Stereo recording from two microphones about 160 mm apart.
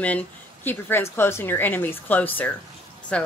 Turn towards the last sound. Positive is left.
turn(degrees=5)  # may be behind; listen again after turning